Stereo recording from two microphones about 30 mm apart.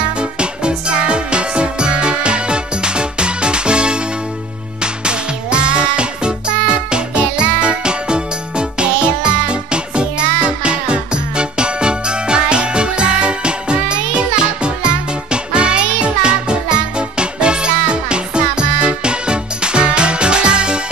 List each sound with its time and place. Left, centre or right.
0.2 s music: right